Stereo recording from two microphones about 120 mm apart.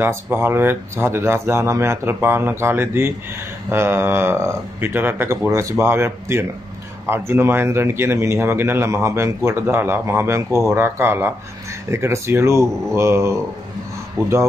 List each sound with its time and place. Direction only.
0.0 s a man's voice: 20° right (ahead or behind)